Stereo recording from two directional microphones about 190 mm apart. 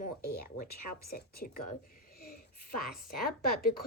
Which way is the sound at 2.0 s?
50° left (ahead or behind).